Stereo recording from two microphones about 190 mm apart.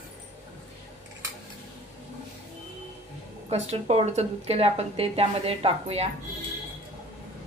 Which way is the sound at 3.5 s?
35° right (ahead or behind).